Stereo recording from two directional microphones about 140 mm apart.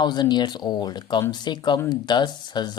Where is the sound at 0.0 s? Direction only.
30° left (ahead or behind).